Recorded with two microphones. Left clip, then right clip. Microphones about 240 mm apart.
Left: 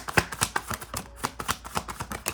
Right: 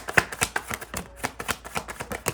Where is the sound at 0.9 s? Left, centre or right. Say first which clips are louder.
Right 1 dB; centre.